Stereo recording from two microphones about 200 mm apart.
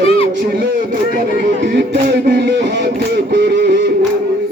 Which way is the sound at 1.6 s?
55° right (ahead or behind).